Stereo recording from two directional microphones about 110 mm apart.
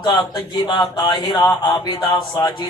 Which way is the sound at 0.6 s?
40° left (ahead or behind).